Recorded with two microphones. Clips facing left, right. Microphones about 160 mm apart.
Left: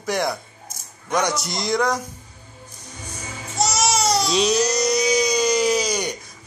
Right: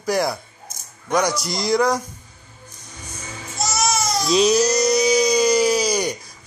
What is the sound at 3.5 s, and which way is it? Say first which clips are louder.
Baby cry: left 1 dB; 85° left.